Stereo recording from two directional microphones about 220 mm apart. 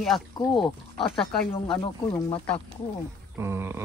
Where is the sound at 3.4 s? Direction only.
10° right (ahead or behind).